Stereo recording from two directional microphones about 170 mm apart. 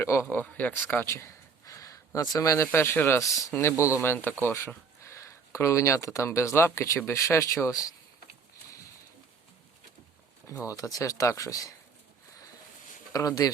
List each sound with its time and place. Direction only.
0.0 s a man's voice: 15° left (ahead or behind)
10.7 s speech: 20° left (ahead or behind)
13.1 s speech: 20° left (ahead or behind)